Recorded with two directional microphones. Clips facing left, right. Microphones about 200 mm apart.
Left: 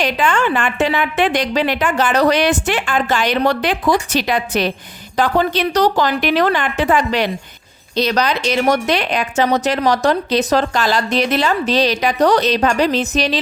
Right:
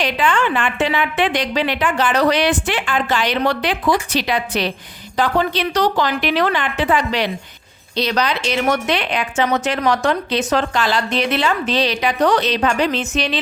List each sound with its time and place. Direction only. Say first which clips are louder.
0.0 s a woman's voice: left 1 dB; 45° left (ahead or behind)